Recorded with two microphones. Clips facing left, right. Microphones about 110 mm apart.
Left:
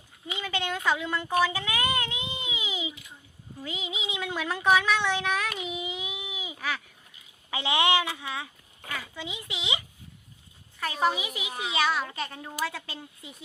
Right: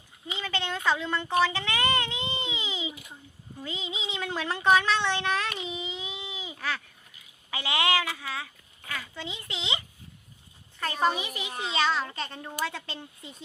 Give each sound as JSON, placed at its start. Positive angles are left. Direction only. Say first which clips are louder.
{"t": 0.3, "sound": "a woman's voice", "louder": "left 1 dB", "side_deg": 10}